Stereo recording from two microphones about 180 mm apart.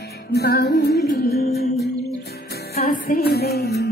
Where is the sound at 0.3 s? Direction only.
65° left (ahead or behind).